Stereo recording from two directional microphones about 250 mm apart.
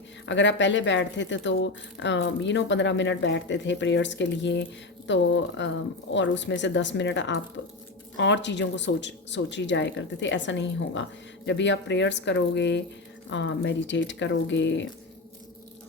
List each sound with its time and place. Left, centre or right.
0.3 s speech: left